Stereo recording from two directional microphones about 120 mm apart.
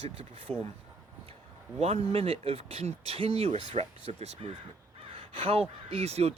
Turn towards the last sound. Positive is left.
turn(degrees=-60)  # may be behind; listen again after turning